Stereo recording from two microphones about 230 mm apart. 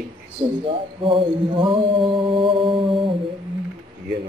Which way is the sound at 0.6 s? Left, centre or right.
Right.